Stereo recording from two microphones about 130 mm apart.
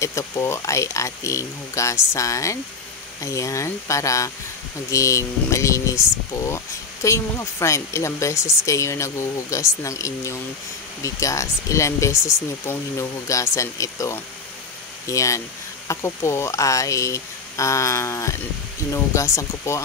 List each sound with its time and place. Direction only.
0.0 s speech: 25° left (ahead or behind)